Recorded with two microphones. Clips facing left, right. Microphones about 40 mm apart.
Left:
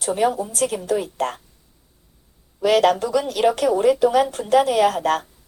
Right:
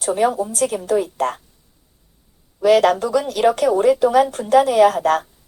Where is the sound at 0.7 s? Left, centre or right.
Centre.